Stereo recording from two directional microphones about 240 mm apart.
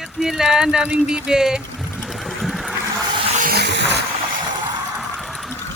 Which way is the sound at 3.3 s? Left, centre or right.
Right.